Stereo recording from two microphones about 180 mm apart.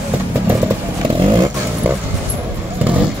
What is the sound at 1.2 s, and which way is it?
Vehicle, 25° right (ahead or behind).